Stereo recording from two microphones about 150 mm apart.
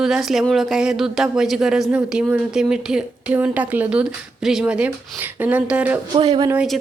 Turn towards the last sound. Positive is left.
turn(degrees=-35)  # may be behind; listen again after turning